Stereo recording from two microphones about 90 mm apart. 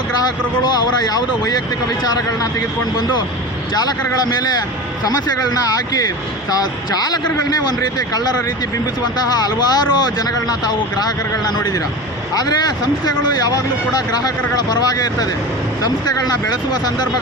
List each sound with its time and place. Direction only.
0.2 s speech: 45° left (ahead or behind)
2.9 s speech: 50° left (ahead or behind)
6.5 s speech: 45° left (ahead or behind)
9.4 s speech: 50° left (ahead or behind)